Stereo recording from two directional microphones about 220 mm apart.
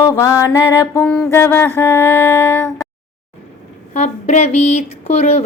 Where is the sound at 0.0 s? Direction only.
15° left (ahead or behind).